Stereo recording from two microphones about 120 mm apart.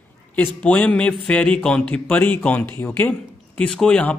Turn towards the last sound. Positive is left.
turn(degrees=10)  # may be behind; listen again after turning